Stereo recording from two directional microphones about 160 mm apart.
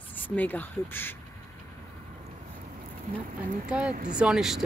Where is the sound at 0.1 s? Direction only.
10° left (ahead or behind).